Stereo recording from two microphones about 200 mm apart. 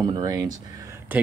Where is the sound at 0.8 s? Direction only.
15° right (ahead or behind).